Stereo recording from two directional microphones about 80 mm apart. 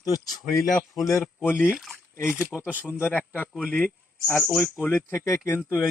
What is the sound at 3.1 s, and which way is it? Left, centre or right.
Speech, left.